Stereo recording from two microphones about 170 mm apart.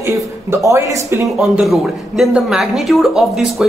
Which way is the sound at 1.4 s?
Centre (ahead or behind).